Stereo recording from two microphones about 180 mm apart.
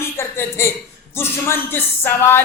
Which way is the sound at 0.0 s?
15° left (ahead or behind).